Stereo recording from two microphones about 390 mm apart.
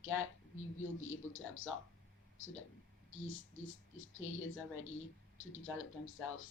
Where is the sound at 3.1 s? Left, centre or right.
Left.